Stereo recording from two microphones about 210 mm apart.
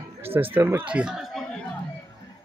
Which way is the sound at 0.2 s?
10° right (ahead or behind).